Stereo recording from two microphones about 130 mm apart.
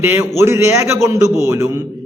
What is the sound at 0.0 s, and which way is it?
A man's voice, 20° right (ahead or behind).